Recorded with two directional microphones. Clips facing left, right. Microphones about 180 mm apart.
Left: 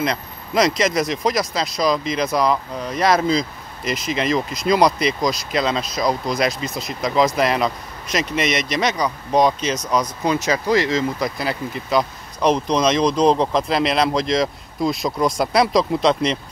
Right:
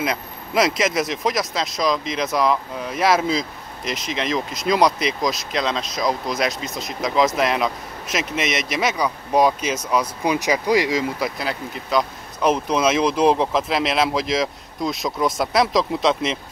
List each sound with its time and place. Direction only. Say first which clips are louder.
0.0 s speech: left 2 dB; 5° right (ahead or behind)